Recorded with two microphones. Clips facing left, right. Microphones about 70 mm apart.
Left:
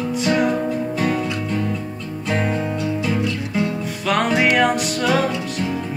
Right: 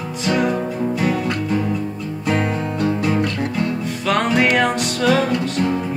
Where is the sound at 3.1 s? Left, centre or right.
Right.